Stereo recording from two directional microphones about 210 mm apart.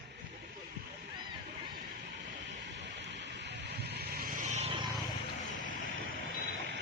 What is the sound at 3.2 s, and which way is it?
Vehicle, 55° right (ahead or behind).